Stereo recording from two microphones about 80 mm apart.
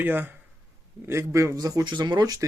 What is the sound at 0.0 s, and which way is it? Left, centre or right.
Speech, right.